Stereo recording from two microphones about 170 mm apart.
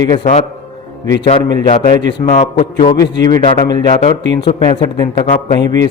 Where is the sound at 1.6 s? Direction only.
50° left (ahead or behind).